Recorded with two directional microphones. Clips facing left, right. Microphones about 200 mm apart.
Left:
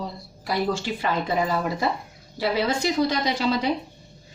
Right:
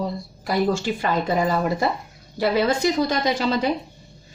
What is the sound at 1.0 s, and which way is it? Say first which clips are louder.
A woman's voice: right 3 dB; 45° right (ahead or behind).